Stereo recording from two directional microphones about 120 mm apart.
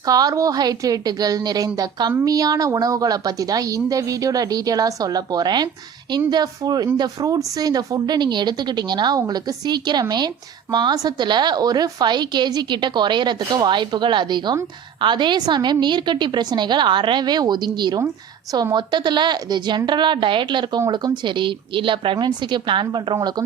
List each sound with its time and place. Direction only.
0.0 s a woman's voice: 30° right (ahead or behind)